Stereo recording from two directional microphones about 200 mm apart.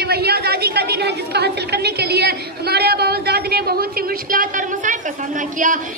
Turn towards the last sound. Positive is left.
turn(degrees=-40)  # may be behind; listen again after turning